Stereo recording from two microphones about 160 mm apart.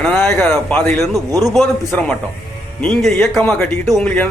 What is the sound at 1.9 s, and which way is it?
Speech, 10° left (ahead or behind).